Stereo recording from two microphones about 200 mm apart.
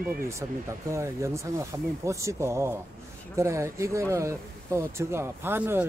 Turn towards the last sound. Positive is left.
turn(degrees=-10)  # may be behind; listen again after turning